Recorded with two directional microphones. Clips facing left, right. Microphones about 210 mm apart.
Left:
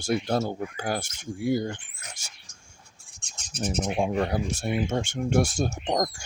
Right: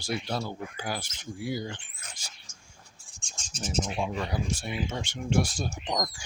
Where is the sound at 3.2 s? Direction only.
60° left (ahead or behind).